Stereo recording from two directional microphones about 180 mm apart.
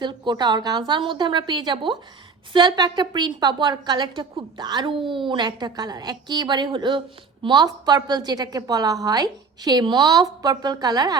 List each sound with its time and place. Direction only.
0.0 s a woman's voice: 25° right (ahead or behind)